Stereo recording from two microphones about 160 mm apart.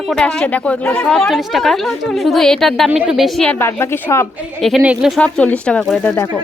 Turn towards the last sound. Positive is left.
turn(degrees=10)  # may be behind; listen again after turning